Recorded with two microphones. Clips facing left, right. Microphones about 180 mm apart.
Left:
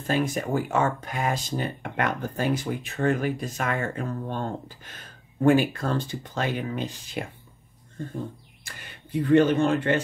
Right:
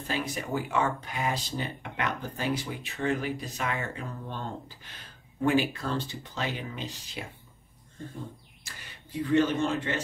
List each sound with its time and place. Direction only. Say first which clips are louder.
0.0 s speech: left 7 dB; 45° left (ahead or behind)
8.6 s speech: left 4 dB; 55° left (ahead or behind)